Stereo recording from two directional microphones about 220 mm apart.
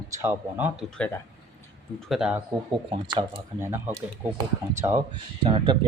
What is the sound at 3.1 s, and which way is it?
Speech, 15° right (ahead or behind).